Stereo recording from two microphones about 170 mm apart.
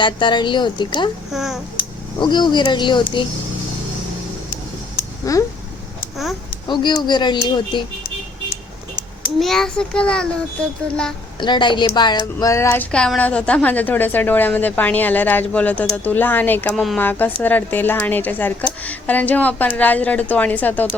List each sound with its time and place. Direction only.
0.0 s a woman's voice: 30° left (ahead or behind)
1.3 s a child's voice: centre (ahead or behind)
2.1 s a woman's voice: 25° left (ahead or behind)
5.2 s speech: 20° left (ahead or behind)
6.7 s a woman's voice: 25° left (ahead or behind)
9.4 s a child's voice: centre (ahead or behind)
11.3 s speech: 25° left (ahead or behind); by 17.0 s centre (ahead or behind)
17.0 s speech: 10° left (ahead or behind)